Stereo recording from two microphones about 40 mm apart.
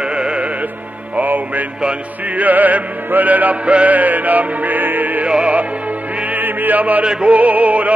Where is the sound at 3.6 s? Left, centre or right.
Right.